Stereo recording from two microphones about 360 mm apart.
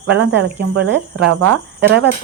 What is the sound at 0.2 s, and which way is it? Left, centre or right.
Speech, right.